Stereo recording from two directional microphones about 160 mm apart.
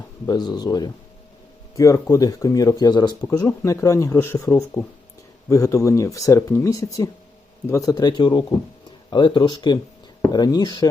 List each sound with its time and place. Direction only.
0.3 s speech: 25° left (ahead or behind)